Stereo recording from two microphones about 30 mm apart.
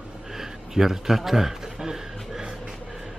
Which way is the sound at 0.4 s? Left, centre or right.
Centre.